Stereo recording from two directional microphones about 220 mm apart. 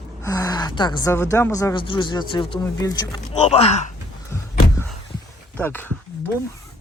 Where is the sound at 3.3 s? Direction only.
30° left (ahead or behind).